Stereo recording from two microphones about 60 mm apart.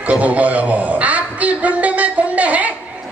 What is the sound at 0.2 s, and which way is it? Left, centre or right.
A man's voice, right.